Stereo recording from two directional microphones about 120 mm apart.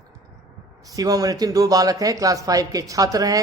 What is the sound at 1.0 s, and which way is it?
Speech, 30° right (ahead or behind).